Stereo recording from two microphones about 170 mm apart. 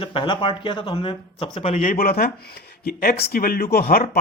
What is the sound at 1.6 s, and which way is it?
Speech, 45° left (ahead or behind).